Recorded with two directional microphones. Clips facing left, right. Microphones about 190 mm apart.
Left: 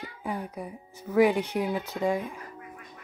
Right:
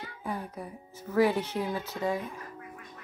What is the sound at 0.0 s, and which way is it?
Speech, 10° left (ahead or behind).